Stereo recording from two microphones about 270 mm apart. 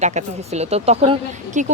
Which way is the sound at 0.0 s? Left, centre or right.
Right.